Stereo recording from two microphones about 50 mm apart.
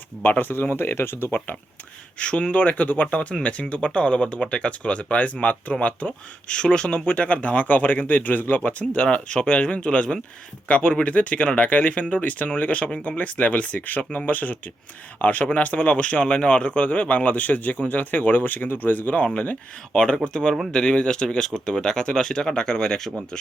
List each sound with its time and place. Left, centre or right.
0.2 s speech: left
2.1 s speech: left
9.0 s speech: left
19.2 s speech: left
19.9 s speech: centre